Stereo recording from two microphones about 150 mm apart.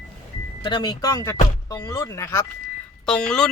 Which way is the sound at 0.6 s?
30° left (ahead or behind).